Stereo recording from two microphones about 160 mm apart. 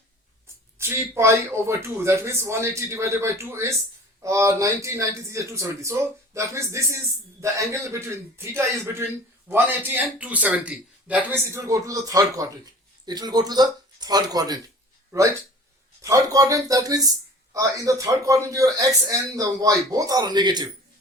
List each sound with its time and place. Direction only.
0.8 s a man's voice: 15° right (ahead or behind)
16.0 s speech: 20° right (ahead or behind)